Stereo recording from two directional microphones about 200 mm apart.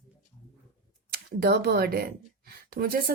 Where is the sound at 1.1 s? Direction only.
50° right (ahead or behind).